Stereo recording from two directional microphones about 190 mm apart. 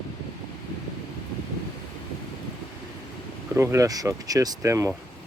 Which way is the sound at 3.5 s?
15° right (ahead or behind).